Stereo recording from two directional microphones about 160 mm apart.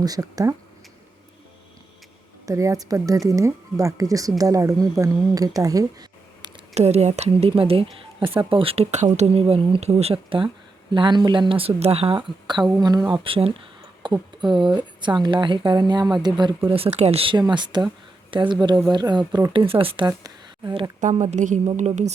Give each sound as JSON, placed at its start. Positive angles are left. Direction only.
{"t": 0.0, "sound": "speech", "side_deg": -20}
{"t": 2.5, "sound": "speech", "side_deg": -20}
{"t": 6.7, "sound": "speech", "side_deg": -40}
{"t": 21.0, "sound": "a woman's voice", "side_deg": -50}